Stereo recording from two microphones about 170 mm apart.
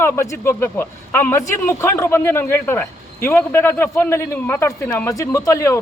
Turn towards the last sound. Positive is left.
turn(degrees=20)  # may be behind; listen again after turning